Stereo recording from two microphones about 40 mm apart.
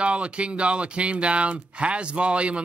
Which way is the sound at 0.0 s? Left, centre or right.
Right.